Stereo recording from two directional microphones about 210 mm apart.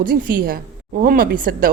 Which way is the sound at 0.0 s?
40° right (ahead or behind).